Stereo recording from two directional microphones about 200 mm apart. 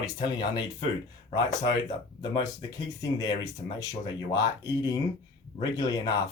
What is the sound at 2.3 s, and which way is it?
Speech, 20° left (ahead or behind).